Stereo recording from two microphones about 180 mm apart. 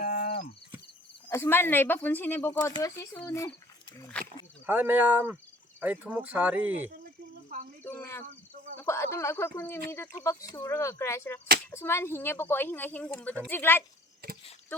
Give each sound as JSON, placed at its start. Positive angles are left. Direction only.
{"t": 0.0, "sound": "cricket", "side_deg": 55}
{"t": 1.3, "sound": "speech", "side_deg": 15}
{"t": 4.1, "sound": "a sound", "side_deg": 10}
{"t": 4.6, "sound": "speech", "side_deg": -10}
{"t": 7.9, "sound": "cricket", "side_deg": 15}
{"t": 8.8, "sound": "speech", "side_deg": 15}
{"t": 14.2, "sound": "a sound", "side_deg": -55}